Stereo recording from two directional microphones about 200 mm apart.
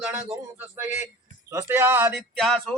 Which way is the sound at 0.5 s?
10° right (ahead or behind).